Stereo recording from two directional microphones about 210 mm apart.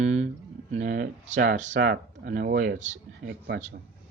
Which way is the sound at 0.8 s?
45° right (ahead or behind).